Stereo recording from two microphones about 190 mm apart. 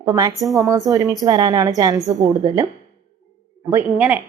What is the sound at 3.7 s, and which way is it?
Speech, 10° right (ahead or behind).